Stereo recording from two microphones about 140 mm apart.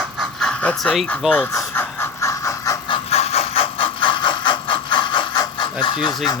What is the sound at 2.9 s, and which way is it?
Mechanisms, 45° left (ahead or behind).